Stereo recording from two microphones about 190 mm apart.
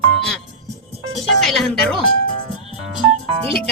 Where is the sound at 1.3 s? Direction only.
Centre (ahead or behind).